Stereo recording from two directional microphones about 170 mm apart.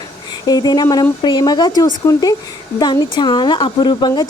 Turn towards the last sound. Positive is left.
turn(degrees=25)  # may be behind; listen again after turning